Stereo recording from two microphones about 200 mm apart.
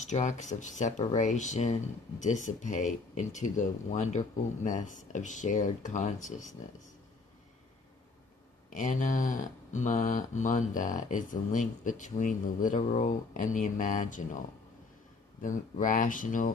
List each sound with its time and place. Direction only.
0.1 s speech: 35° left (ahead or behind)
8.7 s speech: 40° left (ahead or behind)
15.4 s speech: 40° left (ahead or behind)